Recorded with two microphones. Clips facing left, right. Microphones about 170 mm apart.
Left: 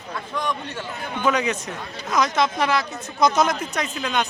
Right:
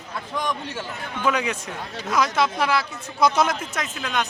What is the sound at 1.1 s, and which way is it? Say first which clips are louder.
Speech: left 2 dB; 5° right (ahead or behind).